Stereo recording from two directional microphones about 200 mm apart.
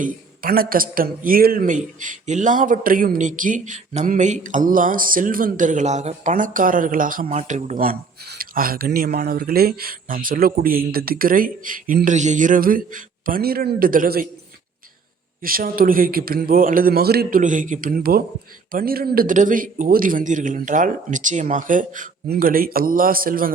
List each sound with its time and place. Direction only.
0.0 s speech: 45° right (ahead or behind)
15.4 s speech: 45° right (ahead or behind)